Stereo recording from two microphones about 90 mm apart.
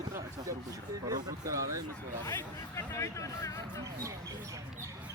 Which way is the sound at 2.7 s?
35° left (ahead or behind).